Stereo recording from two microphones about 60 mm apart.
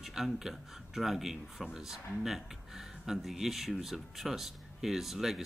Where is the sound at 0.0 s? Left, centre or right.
Centre.